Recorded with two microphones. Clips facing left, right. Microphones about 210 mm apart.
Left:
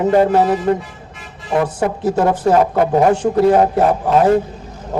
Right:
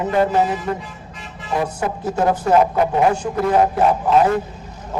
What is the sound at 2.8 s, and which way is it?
Speech, 35° left (ahead or behind).